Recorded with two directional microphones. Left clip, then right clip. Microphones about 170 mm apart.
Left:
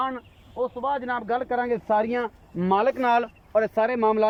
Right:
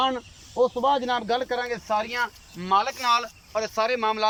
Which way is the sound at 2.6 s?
55° left (ahead or behind).